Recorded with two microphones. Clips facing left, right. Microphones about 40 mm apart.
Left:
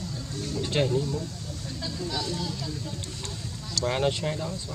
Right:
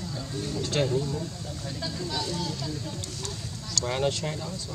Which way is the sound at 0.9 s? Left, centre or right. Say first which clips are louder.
Left 1 dB; centre.